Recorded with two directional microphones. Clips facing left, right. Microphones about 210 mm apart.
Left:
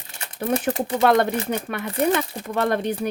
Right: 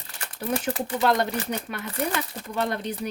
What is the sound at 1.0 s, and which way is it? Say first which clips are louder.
A woman's voice: left 5 dB; 55° left (ahead or behind).